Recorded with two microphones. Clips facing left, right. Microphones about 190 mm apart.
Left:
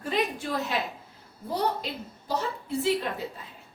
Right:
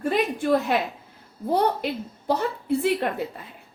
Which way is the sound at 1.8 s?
60° right (ahead or behind).